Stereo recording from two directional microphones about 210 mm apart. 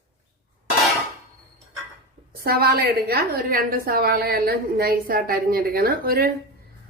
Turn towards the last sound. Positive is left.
turn(degrees=-45)  # may be behind; listen again after turning